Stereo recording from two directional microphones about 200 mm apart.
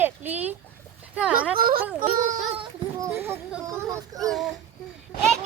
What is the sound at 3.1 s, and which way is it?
Speech, 10° right (ahead or behind).